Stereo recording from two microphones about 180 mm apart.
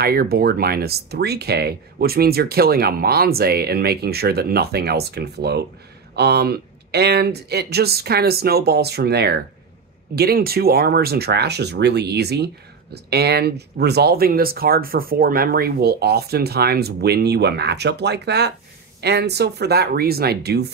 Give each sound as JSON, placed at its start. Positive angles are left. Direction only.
{"t": 0.0, "sound": "speech", "side_deg": -60}